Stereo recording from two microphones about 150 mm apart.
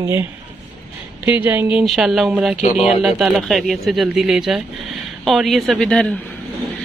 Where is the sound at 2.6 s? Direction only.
45° left (ahead or behind).